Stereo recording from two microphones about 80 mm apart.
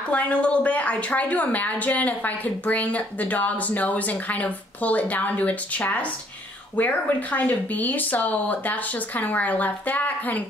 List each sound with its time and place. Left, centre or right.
0.1 s a woman's voice: centre